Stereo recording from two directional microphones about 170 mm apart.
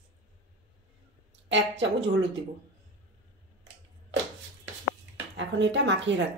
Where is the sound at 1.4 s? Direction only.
90° right.